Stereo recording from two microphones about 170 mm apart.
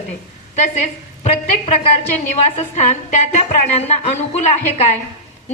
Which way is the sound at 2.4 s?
40° left (ahead or behind).